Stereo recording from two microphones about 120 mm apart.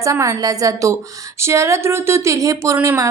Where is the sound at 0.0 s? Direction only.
25° right (ahead or behind).